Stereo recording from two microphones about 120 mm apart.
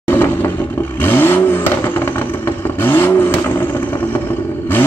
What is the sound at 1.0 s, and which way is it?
Vehicle, 20° left (ahead or behind).